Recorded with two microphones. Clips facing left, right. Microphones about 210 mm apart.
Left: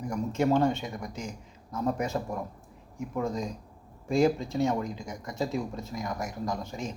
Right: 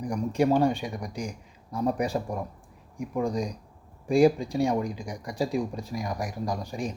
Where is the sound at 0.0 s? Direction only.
15° right (ahead or behind).